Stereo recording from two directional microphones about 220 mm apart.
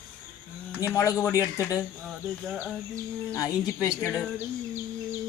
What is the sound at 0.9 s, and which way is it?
Speech, 15° left (ahead or behind).